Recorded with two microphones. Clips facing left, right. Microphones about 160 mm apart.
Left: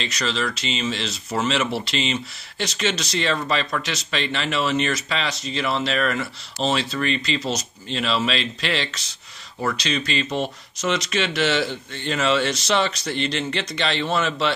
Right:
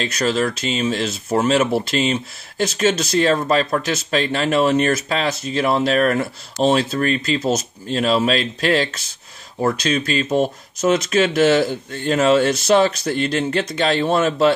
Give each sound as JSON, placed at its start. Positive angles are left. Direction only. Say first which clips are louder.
{"t": 0.0, "sound": "speech", "louder": "right 6 dB", "side_deg": -50}